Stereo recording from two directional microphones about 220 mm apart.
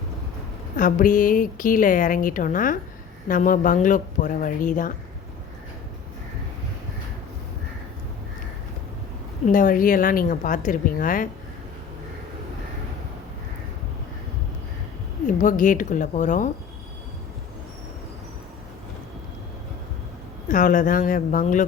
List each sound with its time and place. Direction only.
0.8 s a woman's voice: 35° left (ahead or behind)
9.5 s a woman's voice: 40° left (ahead or behind)
15.3 s a woman's voice: 35° left (ahead or behind)
20.5 s a woman's voice: 35° left (ahead or behind)